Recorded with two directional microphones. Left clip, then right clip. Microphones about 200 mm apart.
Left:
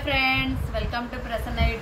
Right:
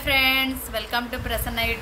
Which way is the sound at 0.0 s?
65° right (ahead or behind).